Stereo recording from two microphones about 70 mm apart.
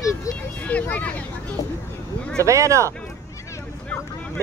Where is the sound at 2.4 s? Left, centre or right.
Right.